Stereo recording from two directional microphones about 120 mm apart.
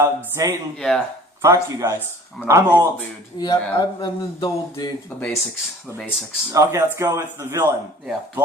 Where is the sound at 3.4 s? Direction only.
40° left (ahead or behind).